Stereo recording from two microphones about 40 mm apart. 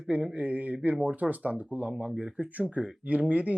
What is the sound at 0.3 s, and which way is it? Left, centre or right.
Speech, right.